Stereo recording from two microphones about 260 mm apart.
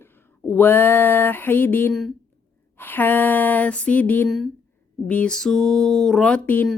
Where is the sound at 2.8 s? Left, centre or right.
Centre.